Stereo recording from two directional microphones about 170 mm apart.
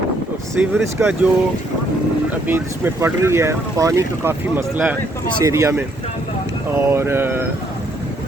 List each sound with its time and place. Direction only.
0.6 s speech: 10° right (ahead or behind)
2.5 s speech: 15° right (ahead or behind)